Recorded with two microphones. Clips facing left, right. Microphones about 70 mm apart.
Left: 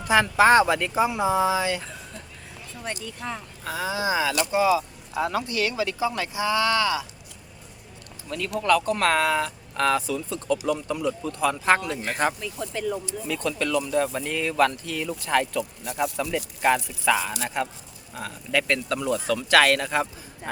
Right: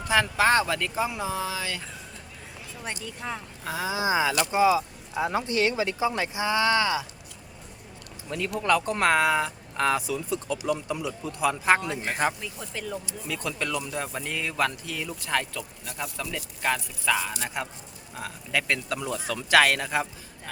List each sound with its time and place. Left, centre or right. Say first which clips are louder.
0.0 s speech: left 4 dB; centre
2.8 s speech: left 2 dB; centre
4.0 s speech: right 1 dB; right
4.8 s a sound: left 1 dB; centre
5.3 s speech: right 1 dB; right
8.5 s speech: left 3 dB; centre